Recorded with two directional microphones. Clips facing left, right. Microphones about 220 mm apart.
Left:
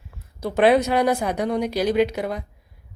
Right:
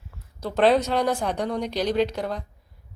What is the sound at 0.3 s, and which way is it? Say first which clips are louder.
Speech: left 2 dB; 10° left (ahead or behind).